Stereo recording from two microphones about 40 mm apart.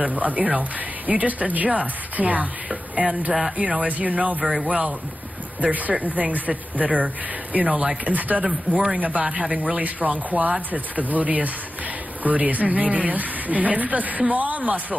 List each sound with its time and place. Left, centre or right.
0.0 s speech: right
8.5 s speech: centre
8.9 s speech: right
9.8 s speech: right